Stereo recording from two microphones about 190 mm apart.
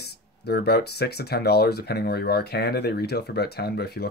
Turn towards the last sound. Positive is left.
turn(degrees=60)  # may be behind; listen again after turning